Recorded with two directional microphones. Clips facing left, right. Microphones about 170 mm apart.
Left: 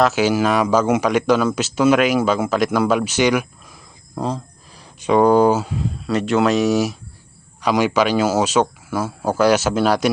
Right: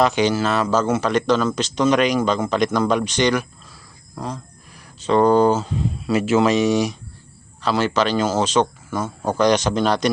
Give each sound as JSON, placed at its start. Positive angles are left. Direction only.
{"t": 0.0, "sound": "speech", "side_deg": 5}
{"t": 4.1, "sound": "speech", "side_deg": 30}
{"t": 4.9, "sound": "speech", "side_deg": 10}
{"t": 6.1, "sound": "speech", "side_deg": -5}
{"t": 7.6, "sound": "speech", "side_deg": 15}